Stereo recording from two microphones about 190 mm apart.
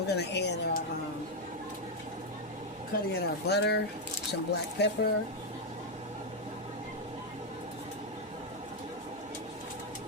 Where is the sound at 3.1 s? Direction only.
60° left (ahead or behind).